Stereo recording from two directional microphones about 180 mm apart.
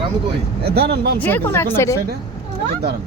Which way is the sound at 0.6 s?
65° right (ahead or behind).